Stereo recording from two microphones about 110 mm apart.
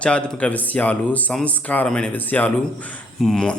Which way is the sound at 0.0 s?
10° left (ahead or behind).